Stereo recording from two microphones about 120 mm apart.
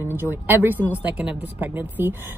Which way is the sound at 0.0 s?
20° right (ahead or behind).